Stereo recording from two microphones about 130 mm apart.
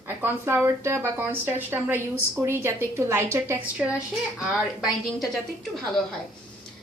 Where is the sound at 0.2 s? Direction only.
20° right (ahead or behind).